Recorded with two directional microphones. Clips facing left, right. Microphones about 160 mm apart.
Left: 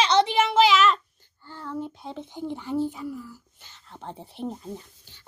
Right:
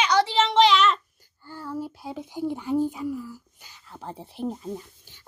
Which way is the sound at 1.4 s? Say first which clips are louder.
Right 1 dB; 10° right (ahead or behind).